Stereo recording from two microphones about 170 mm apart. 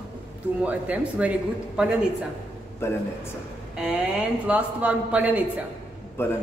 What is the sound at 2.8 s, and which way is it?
Speech, 15° left (ahead or behind).